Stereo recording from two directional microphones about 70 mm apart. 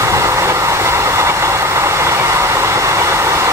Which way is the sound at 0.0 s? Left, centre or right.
Right.